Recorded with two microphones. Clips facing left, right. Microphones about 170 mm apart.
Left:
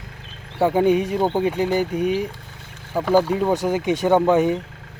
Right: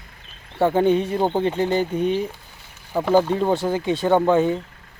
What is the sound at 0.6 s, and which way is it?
Speech, 10° left (ahead or behind).